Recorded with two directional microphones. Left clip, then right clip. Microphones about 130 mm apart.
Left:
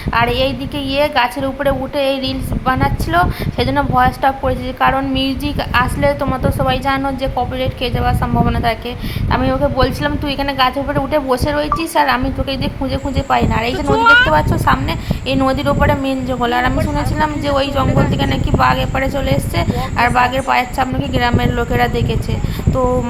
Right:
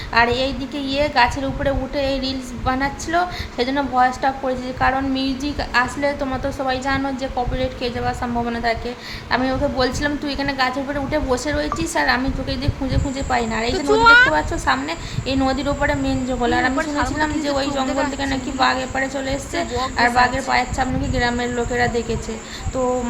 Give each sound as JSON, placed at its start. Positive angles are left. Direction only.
{"t": 0.1, "sound": "a woman's voice", "side_deg": 20}
{"t": 14.0, "sound": "speech", "side_deg": -20}
{"t": 14.3, "sound": "a woman's voice", "side_deg": 15}